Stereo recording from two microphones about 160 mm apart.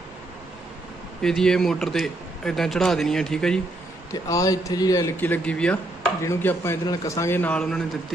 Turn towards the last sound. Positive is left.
turn(degrees=5)  # may be behind; listen again after turning